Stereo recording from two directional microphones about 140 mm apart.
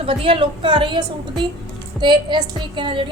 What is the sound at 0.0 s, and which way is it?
A woman's voice, 40° right (ahead or behind).